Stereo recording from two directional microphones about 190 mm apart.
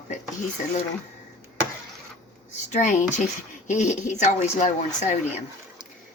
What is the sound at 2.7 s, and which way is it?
Speech, 40° left (ahead or behind).